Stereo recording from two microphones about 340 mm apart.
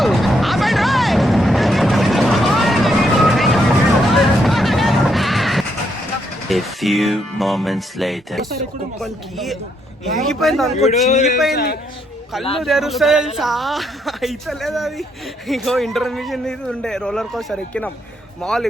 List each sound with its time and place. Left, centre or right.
0.0 s vehicle: centre
4.1 s a sound: centre
6.5 s a man's voice: centre
10.8 s a man's voice: centre
12.5 s a man's voice: centre